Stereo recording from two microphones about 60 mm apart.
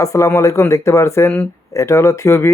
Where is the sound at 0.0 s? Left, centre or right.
Left.